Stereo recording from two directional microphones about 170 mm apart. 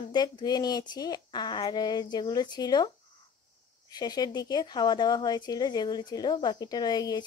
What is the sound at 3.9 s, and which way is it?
Speech, 25° left (ahead or behind).